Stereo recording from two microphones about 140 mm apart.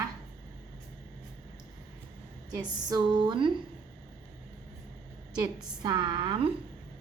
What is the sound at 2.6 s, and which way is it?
Speech, 30° right (ahead or behind).